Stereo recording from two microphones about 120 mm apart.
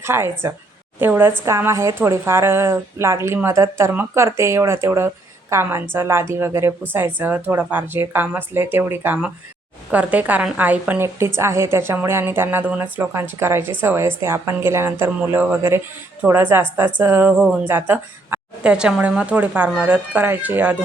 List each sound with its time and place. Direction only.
0.0 s a woman's voice: 20° right (ahead or behind)